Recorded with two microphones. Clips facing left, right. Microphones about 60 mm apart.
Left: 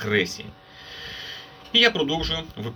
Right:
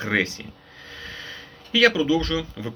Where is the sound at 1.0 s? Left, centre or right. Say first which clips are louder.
Right 1 dB; right.